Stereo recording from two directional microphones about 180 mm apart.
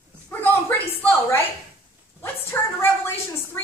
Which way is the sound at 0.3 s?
10° left (ahead or behind).